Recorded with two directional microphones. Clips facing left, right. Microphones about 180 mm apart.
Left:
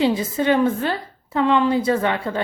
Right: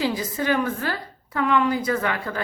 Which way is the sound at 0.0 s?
25° left (ahead or behind).